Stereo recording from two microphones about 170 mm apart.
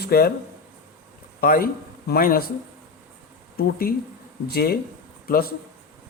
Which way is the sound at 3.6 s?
65° left (ahead or behind).